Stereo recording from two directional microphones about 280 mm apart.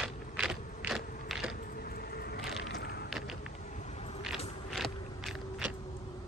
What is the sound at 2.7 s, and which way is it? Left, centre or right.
Vehicle, left.